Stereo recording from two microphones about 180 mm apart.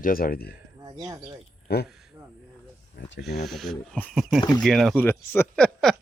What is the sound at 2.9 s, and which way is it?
Snake, 80° left.